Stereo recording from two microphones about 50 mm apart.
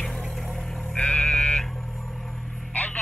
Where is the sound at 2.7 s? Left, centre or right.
Left.